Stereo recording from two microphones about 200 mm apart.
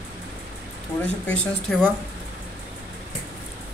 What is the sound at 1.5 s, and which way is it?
Speech, 5° left (ahead or behind).